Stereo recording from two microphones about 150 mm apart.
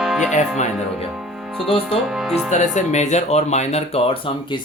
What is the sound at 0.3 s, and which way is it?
Speech, 50° left (ahead or behind).